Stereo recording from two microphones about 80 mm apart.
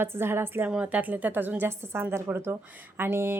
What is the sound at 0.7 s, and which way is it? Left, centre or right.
A woman's voice, centre.